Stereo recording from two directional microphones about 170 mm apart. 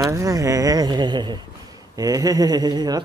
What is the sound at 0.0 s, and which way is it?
A woman's voice, 20° right (ahead or behind).